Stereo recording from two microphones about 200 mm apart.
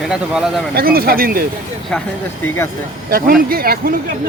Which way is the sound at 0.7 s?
50° right (ahead or behind).